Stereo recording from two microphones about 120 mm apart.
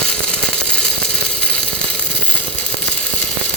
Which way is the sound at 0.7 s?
5° left (ahead or behind).